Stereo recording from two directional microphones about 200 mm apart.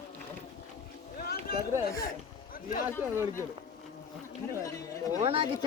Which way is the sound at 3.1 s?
15° right (ahead or behind).